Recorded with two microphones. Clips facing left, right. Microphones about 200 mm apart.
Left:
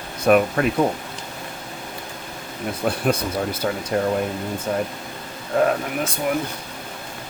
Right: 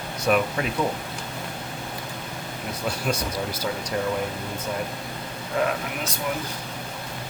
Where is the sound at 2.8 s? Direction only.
55° left (ahead or behind).